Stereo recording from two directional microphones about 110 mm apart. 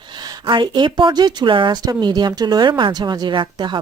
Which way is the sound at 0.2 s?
40° right (ahead or behind).